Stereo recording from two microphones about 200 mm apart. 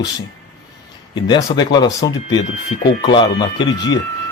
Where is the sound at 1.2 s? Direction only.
20° left (ahead or behind).